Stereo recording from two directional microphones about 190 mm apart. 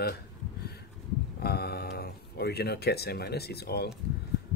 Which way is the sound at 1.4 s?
55° left (ahead or behind).